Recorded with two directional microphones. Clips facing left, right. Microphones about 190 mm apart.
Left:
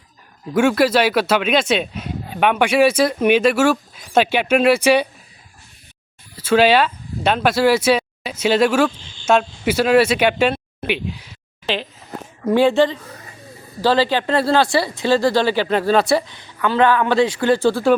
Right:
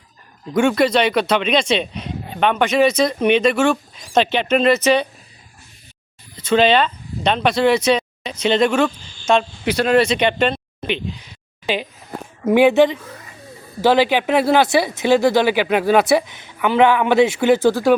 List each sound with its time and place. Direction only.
0.5 s speech: 5° left (ahead or behind)
6.3 s speech: 10° left (ahead or behind)
11.6 s speech: 10° right (ahead or behind)